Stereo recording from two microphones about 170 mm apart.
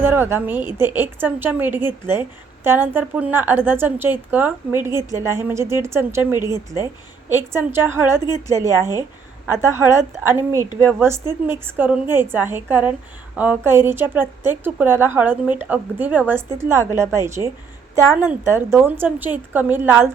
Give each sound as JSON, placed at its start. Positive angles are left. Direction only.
{"t": 0.0, "sound": "a woman's voice", "side_deg": -10}